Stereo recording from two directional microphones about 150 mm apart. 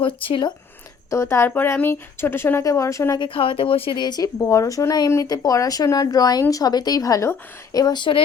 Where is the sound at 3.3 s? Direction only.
35° left (ahead or behind).